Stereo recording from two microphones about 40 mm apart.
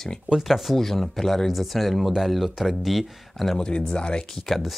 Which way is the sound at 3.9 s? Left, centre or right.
Left.